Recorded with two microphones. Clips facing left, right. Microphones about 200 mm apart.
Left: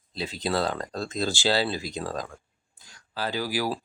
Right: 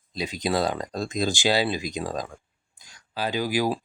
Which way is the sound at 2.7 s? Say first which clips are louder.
Right 2 dB; 15° right (ahead or behind).